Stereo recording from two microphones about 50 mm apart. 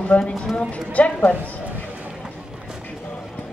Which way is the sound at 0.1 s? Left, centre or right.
Left.